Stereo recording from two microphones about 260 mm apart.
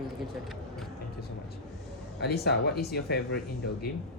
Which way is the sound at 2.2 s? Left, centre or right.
Left.